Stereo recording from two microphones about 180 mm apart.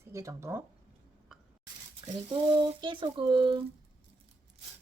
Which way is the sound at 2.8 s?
25° right (ahead or behind).